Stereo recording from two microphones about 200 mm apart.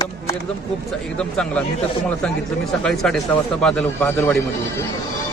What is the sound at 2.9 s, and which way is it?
Speech, 5° left (ahead or behind).